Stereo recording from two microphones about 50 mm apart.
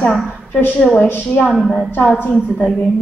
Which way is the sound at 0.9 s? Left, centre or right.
Left.